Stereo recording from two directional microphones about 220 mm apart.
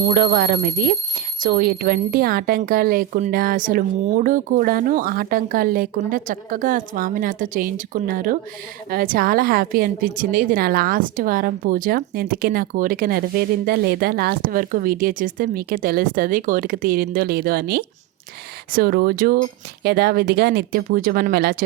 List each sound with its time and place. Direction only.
0.1 s a woman's voice: 40° right (ahead or behind)